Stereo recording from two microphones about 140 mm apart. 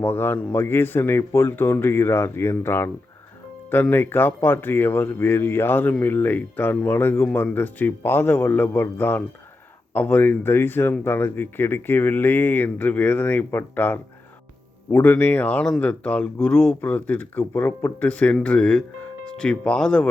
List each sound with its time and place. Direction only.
0.0 s speech: 15° left (ahead or behind)